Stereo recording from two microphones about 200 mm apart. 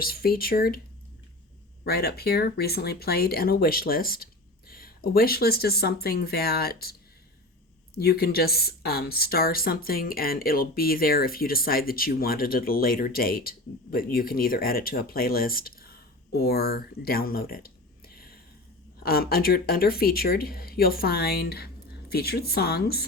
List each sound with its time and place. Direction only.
0.0 s speech: 50° left (ahead or behind)
1.8 s speech: 50° left (ahead or behind)
7.9 s speech: 50° left (ahead or behind)
19.0 s speech: 50° left (ahead or behind)